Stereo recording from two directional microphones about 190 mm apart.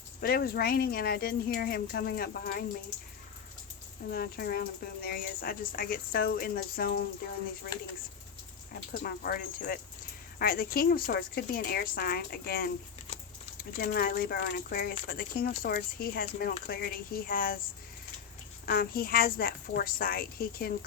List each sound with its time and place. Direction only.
0.2 s speech: 55° left (ahead or behind)
4.1 s speech: 55° left (ahead or behind)
8.9 s speech: 50° left (ahead or behind)
18.6 s speech: 50° left (ahead or behind)